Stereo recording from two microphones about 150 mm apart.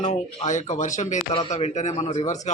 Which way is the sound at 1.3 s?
40° left (ahead or behind).